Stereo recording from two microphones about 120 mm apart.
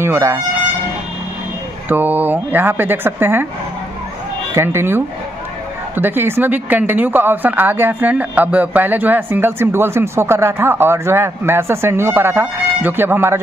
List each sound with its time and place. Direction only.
0.0 s speech: 25° right (ahead or behind)
1.9 s speech: 15° right (ahead or behind)
4.6 s speech: 20° right (ahead or behind)